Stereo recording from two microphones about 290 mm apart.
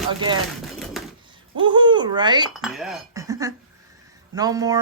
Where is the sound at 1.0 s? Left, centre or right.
Centre.